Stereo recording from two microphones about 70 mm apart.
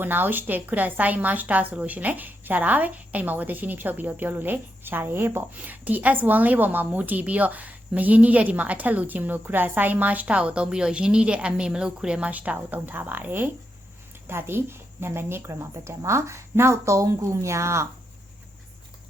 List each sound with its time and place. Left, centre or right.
0.0 s a woman's voice: right